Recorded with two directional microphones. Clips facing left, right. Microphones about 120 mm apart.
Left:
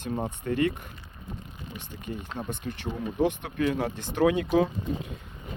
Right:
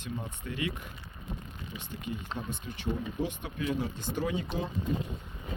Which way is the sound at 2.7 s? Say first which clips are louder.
Left 7 dB; 60° left (ahead or behind).